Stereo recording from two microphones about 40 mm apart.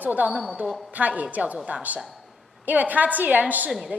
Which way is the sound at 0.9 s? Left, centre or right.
Right.